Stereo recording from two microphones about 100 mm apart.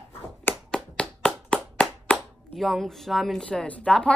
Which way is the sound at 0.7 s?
10° left (ahead or behind).